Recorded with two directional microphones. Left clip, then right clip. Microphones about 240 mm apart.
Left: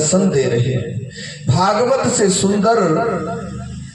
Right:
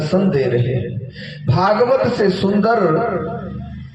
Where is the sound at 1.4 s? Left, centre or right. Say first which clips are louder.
Even; right.